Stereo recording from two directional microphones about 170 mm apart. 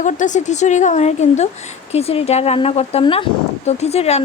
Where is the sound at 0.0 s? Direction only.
45° left (ahead or behind).